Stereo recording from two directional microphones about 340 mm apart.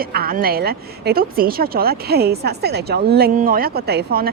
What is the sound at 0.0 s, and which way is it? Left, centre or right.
Speech, right.